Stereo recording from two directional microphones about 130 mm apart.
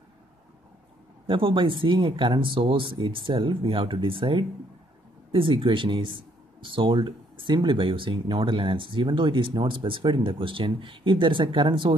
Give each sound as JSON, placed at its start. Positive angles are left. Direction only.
{"t": 1.2, "sound": "speech", "side_deg": -40}